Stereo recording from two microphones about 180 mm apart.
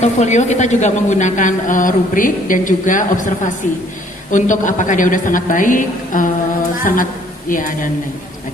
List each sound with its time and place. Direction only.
0.0 s speech: 40° left (ahead or behind)